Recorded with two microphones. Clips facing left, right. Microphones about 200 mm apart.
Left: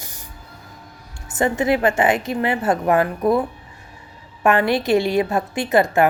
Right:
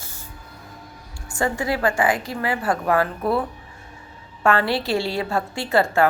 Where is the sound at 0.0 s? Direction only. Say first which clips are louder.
Left 1 dB; 15° left (ahead or behind).